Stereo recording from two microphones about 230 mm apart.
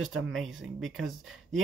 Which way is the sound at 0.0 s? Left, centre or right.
Right.